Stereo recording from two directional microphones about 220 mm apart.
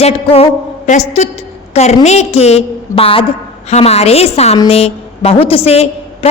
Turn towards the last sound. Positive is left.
turn(degrees=25)  # may be behind; listen again after turning